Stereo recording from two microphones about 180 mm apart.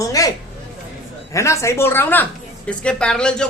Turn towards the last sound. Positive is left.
turn(degrees=5)  # may be behind; listen again after turning